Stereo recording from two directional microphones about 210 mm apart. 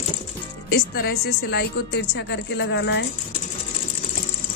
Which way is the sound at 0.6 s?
50° left (ahead or behind).